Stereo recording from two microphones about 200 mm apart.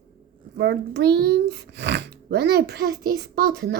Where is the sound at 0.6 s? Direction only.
60° right (ahead or behind).